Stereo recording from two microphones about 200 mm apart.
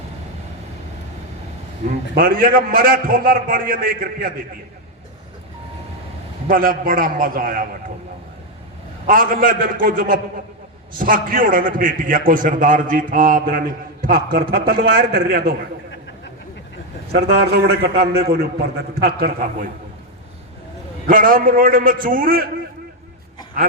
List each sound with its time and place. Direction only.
1.9 s a man's voice: 45° right (ahead or behind)
6.5 s a man's voice: 45° right (ahead or behind)
9.0 s a man's voice: 45° right (ahead or behind)
17.1 s a man's voice: 50° right (ahead or behind)
21.1 s a man's voice: 45° right (ahead or behind)